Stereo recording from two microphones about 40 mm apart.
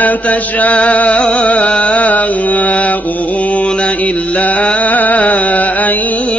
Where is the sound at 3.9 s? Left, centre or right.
Left.